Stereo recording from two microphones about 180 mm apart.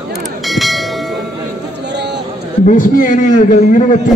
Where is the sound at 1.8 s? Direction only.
70° right (ahead or behind).